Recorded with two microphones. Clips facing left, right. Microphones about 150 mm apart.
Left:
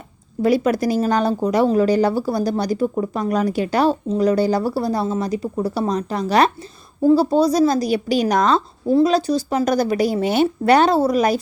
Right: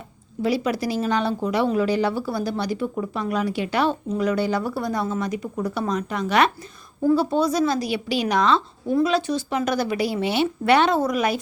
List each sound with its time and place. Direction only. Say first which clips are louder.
0.4 s speech: left 6 dB; 50° left (ahead or behind)